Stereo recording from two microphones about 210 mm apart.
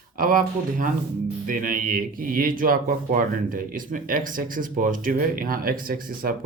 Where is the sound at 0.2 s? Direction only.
40° right (ahead or behind).